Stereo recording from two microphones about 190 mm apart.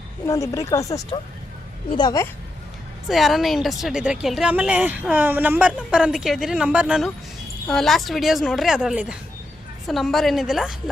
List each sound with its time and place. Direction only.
0.3 s speech: 15° left (ahead or behind)
3.1 s a woman's voice: centre (ahead or behind)